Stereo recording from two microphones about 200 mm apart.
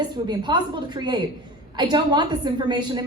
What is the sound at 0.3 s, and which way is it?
A woman's voice, 20° right (ahead or behind).